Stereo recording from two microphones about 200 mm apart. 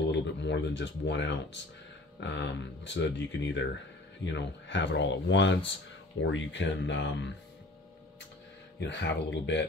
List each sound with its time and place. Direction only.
0.1 s speech: 65° left (ahead or behind)
8.7 s speech: 60° left (ahead or behind)